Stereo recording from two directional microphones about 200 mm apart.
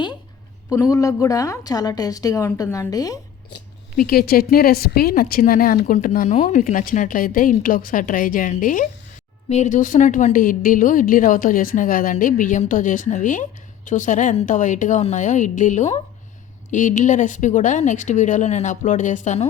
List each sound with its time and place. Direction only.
0.7 s a woman's voice: 15° left (ahead or behind)
3.9 s a woman's voice: 45° left (ahead or behind)